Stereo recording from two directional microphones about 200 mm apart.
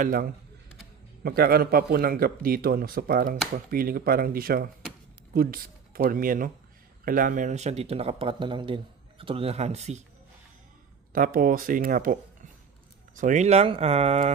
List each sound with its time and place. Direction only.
0.0 s speech: 45° right (ahead or behind)
11.1 s speech: 45° right (ahead or behind)